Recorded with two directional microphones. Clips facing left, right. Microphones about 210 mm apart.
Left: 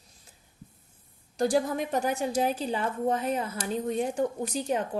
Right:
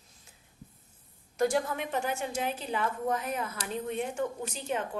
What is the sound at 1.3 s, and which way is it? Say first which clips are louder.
A woman's voice: left 3 dB; 35° left (ahead or behind).